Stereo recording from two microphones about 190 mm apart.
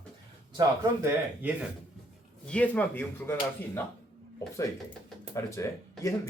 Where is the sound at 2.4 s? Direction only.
5° left (ahead or behind).